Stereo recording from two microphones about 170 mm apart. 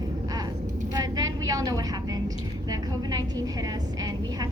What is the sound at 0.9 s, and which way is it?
Vehicle, 20° right (ahead or behind).